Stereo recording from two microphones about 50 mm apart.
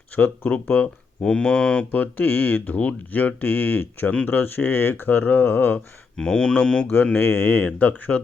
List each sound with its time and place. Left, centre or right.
0.2 s speech: left
1.2 s speech: centre
1.8 s speech: left
6.1 s speech: centre
7.2 s speech: left